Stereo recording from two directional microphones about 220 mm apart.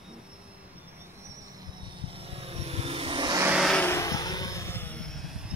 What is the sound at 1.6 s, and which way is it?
Vehicle, 20° right (ahead or behind).